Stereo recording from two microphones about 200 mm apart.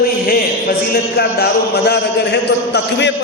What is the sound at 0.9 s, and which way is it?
A man's voice, 55° left (ahead or behind).